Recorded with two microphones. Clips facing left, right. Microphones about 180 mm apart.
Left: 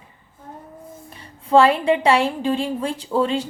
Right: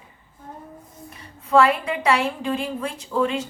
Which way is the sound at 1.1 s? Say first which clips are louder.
Left 4 dB; 30° left (ahead or behind).